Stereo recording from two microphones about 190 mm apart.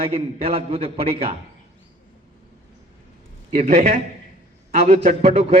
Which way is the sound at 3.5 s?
35° right (ahead or behind).